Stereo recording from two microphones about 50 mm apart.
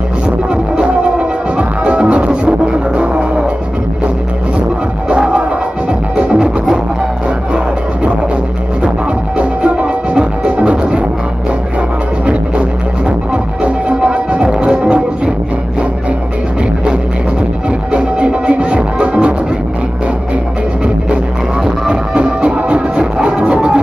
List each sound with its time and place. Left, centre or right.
0.7 s music: right
5.1 s music: centre
9.4 s music: right
13.3 s music: right
17.9 s music: right
21.8 s music: centre